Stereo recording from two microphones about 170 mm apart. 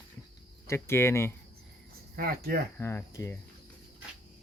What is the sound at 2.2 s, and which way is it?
Speech, 60° right (ahead or behind).